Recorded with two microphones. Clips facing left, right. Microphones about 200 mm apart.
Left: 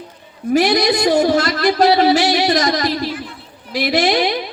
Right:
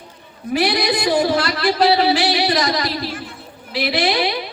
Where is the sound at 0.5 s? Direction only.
45° left (ahead or behind).